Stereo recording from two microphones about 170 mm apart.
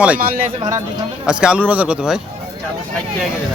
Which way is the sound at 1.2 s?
5° right (ahead or behind).